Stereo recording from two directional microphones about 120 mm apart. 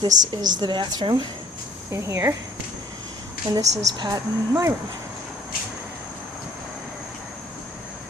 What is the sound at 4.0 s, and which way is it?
Speech, 30° right (ahead or behind).